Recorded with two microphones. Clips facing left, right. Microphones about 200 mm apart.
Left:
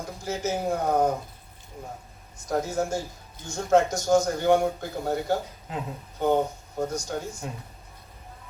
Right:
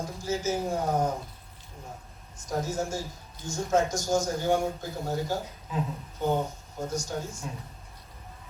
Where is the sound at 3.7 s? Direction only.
60° left (ahead or behind).